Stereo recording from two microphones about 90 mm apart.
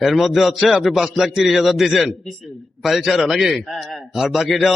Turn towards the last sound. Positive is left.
turn(degrees=0)  # may be behind; listen again after turning